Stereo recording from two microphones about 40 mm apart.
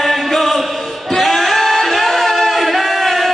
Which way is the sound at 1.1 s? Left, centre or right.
Centre.